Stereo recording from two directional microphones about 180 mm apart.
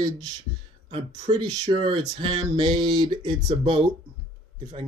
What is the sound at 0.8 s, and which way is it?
Speech, 35° right (ahead or behind).